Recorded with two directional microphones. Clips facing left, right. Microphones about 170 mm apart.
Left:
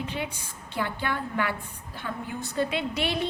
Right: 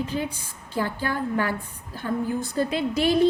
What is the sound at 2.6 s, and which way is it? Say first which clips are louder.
Speech: right 2 dB; 40° right (ahead or behind).